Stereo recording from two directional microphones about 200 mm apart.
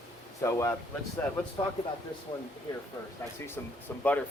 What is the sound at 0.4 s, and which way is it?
Speech, 15° left (ahead or behind).